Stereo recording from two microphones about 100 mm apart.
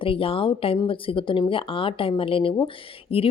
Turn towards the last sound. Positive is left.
turn(degrees=75)  # may be behind; listen again after turning